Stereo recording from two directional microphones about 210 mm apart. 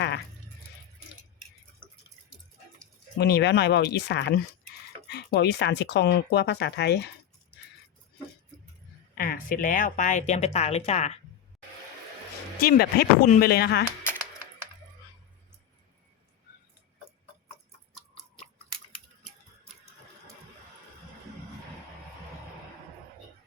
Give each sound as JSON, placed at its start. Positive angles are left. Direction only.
{"t": 3.2, "sound": "speech", "side_deg": 55}
{"t": 9.1, "sound": "speech", "side_deg": 45}
{"t": 12.5, "sound": "speech", "side_deg": 45}